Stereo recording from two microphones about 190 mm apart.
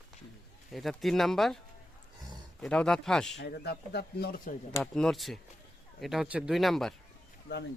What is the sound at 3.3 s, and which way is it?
Speech, 60° left (ahead or behind).